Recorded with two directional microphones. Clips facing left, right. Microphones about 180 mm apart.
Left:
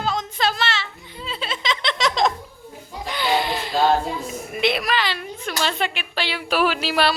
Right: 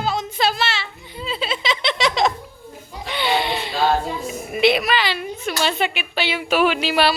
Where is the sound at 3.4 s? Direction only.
40° left (ahead or behind).